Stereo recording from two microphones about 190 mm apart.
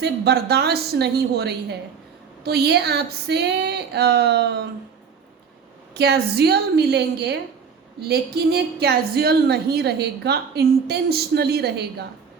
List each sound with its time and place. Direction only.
0.0 s a woman's voice: 60° right (ahead or behind)
5.9 s a woman's voice: 60° right (ahead or behind)